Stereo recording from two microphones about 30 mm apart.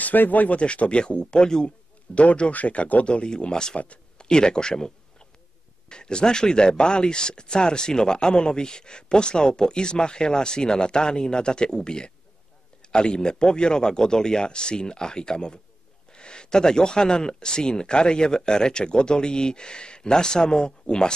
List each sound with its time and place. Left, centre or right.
0.0 s speech: left
0.5 s speech: left
2.1 s speech: left
2.5 s speech: left
3.1 s speech: left
3.7 s speech: left
4.2 s a man's voice: left